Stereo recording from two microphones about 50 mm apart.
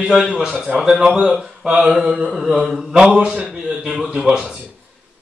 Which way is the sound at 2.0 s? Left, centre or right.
Right.